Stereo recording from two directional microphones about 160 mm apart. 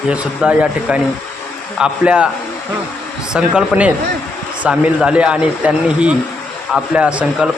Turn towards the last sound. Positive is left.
turn(degrees=-5)  # may be behind; listen again after turning